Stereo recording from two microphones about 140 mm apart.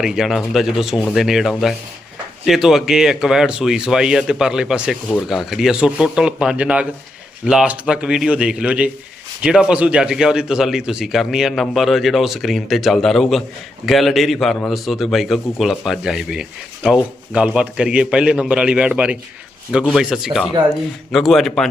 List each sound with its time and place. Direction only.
0.0 s a man's voice: 5° right (ahead or behind)